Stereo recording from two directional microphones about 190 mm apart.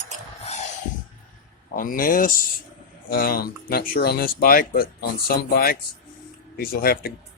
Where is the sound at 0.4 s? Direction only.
35° left (ahead or behind).